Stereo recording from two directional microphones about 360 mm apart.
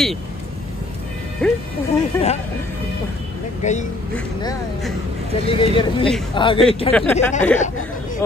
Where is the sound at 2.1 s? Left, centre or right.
Centre.